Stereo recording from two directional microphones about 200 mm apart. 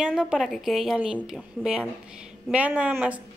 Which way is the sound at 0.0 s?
Centre (ahead or behind).